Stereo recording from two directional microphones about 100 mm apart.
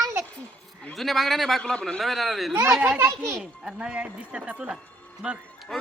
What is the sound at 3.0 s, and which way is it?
Speech, 25° right (ahead or behind).